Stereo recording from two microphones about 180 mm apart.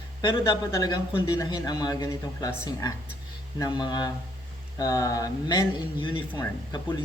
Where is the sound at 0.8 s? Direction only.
20° left (ahead or behind).